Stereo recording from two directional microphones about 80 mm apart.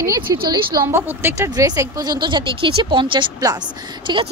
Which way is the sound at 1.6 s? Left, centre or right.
Right.